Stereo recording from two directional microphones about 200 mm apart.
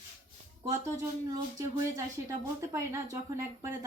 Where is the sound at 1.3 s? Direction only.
15° right (ahead or behind).